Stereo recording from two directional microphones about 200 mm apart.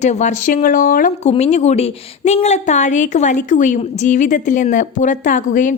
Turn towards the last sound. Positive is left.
turn(degrees=40)  # may be behind; listen again after turning